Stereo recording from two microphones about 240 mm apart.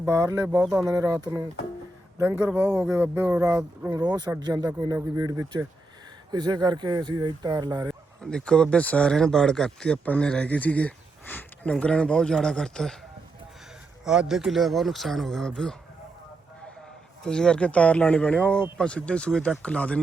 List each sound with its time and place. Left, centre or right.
0.0 s speech: centre
8.2 s speech: centre
14.0 s speech: centre
17.2 s speech: centre